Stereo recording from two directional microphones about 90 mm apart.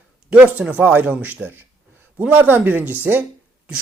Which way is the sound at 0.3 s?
15° right (ahead or behind).